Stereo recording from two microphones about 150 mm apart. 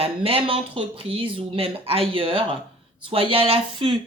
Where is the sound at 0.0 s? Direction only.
40° right (ahead or behind).